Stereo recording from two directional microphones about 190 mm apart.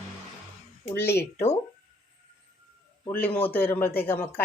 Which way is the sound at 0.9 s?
10° left (ahead or behind).